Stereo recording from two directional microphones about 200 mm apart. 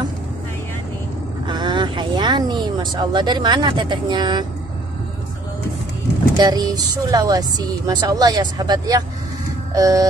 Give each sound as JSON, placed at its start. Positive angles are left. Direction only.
{"t": 1.5, "sound": "speech", "side_deg": -20}
{"t": 6.3, "sound": "speech", "side_deg": -20}
{"t": 9.8, "sound": "music", "side_deg": -15}